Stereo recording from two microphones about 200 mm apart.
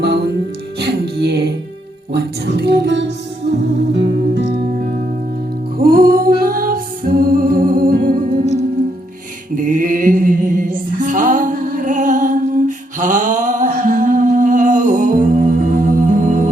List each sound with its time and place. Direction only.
0.0 s music: 55° right (ahead or behind)
4.4 s music: 50° right (ahead or behind)
9.6 s music: 45° right (ahead or behind)